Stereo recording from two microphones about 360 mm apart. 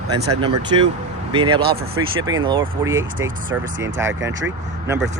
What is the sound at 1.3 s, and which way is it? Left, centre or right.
Speech, centre.